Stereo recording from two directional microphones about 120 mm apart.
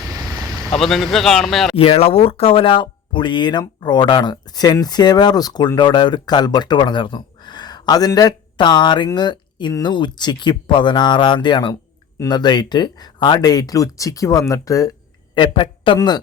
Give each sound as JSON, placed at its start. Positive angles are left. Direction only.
{"t": 0.1, "sound": "vehicle", "side_deg": -30}
{"t": 0.8, "sound": "speech", "side_deg": 0}
{"t": 1.7, "sound": "speech", "side_deg": 55}
{"t": 15.4, "sound": "speech", "side_deg": 45}